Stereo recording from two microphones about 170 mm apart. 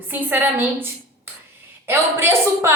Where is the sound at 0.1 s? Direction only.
10° right (ahead or behind).